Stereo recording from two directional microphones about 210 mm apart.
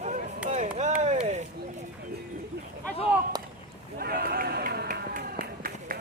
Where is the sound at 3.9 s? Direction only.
45° right (ahead or behind).